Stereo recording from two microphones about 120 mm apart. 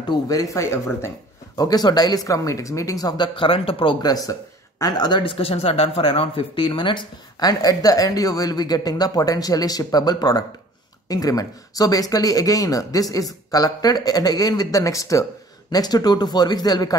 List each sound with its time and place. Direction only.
0.1 s speech: 30° left (ahead or behind)
1.6 s speech: 35° left (ahead or behind); by 3.9 s 50° left (ahead or behind)
4.0 s speech: 30° left (ahead or behind)